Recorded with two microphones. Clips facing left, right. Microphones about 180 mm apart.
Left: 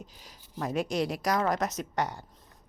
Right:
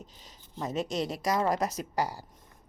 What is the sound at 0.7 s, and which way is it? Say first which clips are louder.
Speech: left 2 dB; 25° right (ahead or behind).